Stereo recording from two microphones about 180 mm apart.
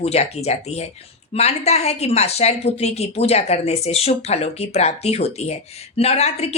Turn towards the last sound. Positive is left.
turn(degrees=35)  # may be behind; listen again after turning